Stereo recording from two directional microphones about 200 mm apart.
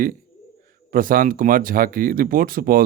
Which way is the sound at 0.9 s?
45° right (ahead or behind).